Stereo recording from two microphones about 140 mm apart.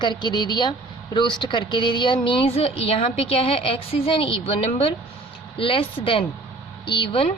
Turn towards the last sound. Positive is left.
turn(degrees=40)  # may be behind; listen again after turning